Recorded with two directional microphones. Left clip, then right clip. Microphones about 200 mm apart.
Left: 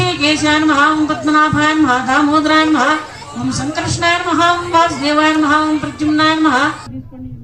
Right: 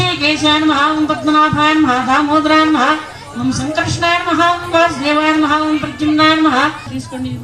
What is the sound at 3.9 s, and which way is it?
Speech, 10° left (ahead or behind).